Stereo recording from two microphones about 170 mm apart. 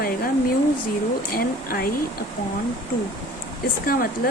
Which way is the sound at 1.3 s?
60° left (ahead or behind).